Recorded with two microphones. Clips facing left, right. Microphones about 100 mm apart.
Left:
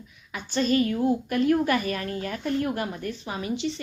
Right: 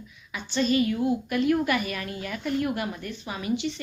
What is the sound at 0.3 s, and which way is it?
A woman's voice, 45° left (ahead or behind).